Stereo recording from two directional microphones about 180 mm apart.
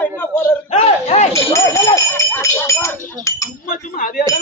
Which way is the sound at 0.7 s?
40° left (ahead or behind).